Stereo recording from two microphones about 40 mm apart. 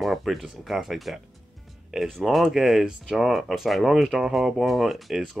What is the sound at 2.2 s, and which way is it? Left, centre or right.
Speech, centre.